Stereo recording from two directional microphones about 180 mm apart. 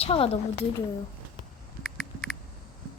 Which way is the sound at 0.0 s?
30° left (ahead or behind).